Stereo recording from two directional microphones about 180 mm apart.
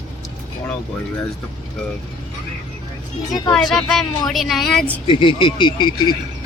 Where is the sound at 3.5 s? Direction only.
5° left (ahead or behind).